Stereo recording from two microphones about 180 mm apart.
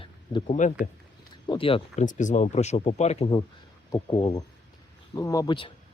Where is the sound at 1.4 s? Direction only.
25° left (ahead or behind).